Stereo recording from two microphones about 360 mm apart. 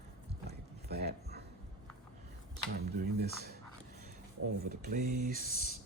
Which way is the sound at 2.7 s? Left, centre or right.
Right.